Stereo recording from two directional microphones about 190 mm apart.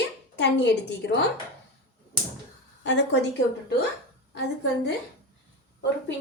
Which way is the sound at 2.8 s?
65° left (ahead or behind).